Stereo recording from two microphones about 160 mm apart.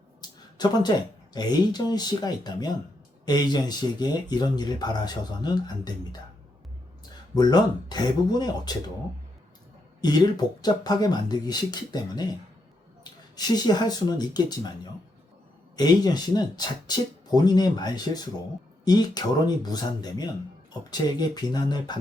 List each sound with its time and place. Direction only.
0.2 s speech: 25° left (ahead or behind)
7.3 s speech: 25° left (ahead or behind)
10.0 s speech: 25° left (ahead or behind)
13.3 s speech: 25° left (ahead or behind)
15.7 s speech: 25° left (ahead or behind)